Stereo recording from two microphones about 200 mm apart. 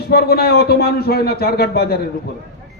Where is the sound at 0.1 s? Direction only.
50° left (ahead or behind).